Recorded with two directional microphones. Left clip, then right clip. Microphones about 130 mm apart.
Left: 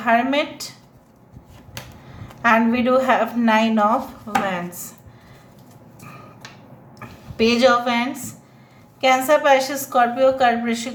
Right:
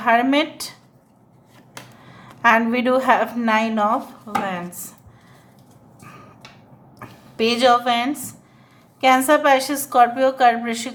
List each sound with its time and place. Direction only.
0.0 s a woman's voice: 35° right (ahead or behind)
2.4 s a woman's voice: 35° right (ahead or behind); by 4.9 s 15° right (ahead or behind)
7.0 s a woman's voice: 25° right (ahead or behind)